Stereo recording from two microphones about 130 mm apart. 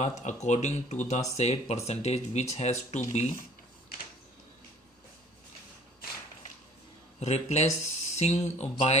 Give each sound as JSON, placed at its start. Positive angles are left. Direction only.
{"t": 0.0, "sound": "speech", "side_deg": 60}
{"t": 7.2, "sound": "speech", "side_deg": 55}